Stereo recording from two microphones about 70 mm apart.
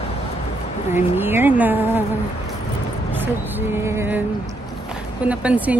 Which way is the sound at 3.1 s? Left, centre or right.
Right.